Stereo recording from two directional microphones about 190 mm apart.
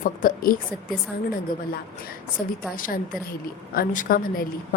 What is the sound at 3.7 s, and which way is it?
Speech, 45° left (ahead or behind).